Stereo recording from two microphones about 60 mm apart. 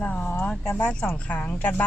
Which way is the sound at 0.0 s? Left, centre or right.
Left.